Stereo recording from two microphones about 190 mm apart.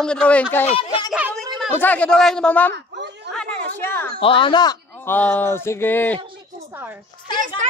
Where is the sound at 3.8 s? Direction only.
10° left (ahead or behind).